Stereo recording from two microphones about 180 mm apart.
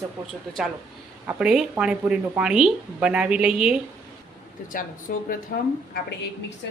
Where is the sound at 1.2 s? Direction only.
5° right (ahead or behind).